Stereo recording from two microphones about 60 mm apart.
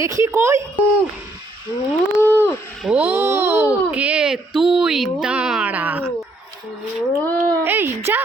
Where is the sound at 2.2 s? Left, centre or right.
Left.